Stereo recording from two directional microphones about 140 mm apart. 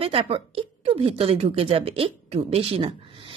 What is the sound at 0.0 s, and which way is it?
A woman's voice, 45° right (ahead or behind).